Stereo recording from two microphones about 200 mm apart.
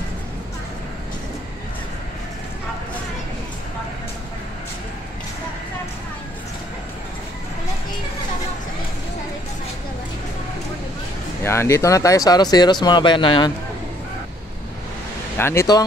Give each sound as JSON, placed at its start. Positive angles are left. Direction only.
{"t": 11.4, "sound": "speech", "side_deg": 15}
{"t": 15.3, "sound": "speech", "side_deg": 10}